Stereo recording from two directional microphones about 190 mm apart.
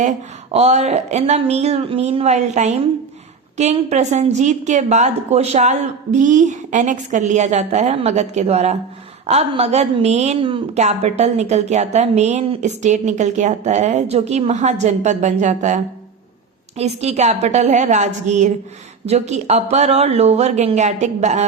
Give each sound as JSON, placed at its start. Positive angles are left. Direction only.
{"t": 0.5, "sound": "a woman's voice", "side_deg": -35}